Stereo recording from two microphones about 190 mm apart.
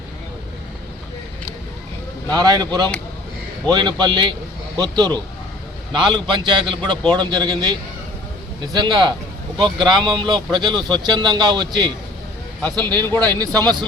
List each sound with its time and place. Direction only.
2.3 s speech: 20° right (ahead or behind)